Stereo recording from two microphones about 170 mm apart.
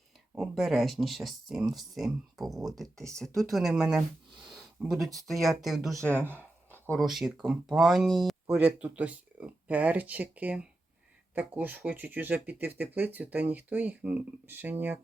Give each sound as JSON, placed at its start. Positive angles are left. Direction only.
{"t": 0.3, "sound": "speech", "side_deg": 0}
{"t": 2.8, "sound": "speech", "side_deg": -20}
{"t": 3.2, "sound": "speech", "side_deg": 0}
{"t": 4.4, "sound": "a sound", "side_deg": 0}
{"t": 5.3, "sound": "speech", "side_deg": 0}
{"t": 6.1, "sound": "speech", "side_deg": -10}
{"t": 6.7, "sound": "a sound", "side_deg": 10}
{"t": 7.1, "sound": "speech", "side_deg": 0}